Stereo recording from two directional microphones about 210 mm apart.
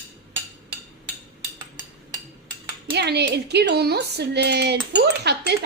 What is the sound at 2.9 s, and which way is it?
Speech, 50° right (ahead or behind).